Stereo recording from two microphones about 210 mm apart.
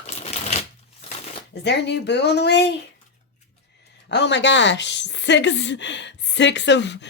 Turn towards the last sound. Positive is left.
turn(degrees=55)  # may be behind; listen again after turning